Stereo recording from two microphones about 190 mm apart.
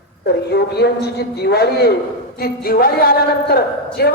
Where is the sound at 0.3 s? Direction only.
60° left (ahead or behind).